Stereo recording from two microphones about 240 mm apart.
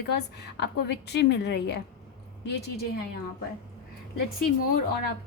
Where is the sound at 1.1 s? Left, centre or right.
Left.